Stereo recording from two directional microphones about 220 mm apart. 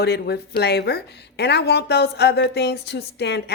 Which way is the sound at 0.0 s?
50° left (ahead or behind).